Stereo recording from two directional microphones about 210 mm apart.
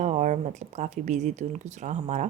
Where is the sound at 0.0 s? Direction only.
35° right (ahead or behind).